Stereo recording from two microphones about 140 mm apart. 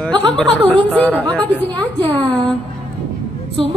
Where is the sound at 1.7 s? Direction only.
30° right (ahead or behind).